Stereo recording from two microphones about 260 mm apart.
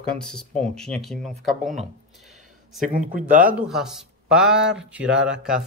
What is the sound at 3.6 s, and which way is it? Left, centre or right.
Speech, centre.